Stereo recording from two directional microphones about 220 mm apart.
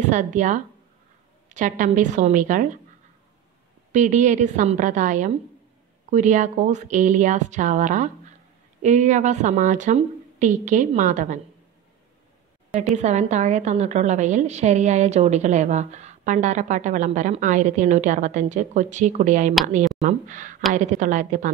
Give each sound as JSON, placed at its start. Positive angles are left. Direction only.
{"t": 0.1, "sound": "a woman's voice", "side_deg": -35}
{"t": 3.9, "sound": "a woman's voice", "side_deg": -35}
{"t": 12.9, "sound": "a woman's voice", "side_deg": -30}